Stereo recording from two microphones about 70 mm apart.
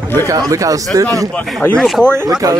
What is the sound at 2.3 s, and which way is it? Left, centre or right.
Speech, right.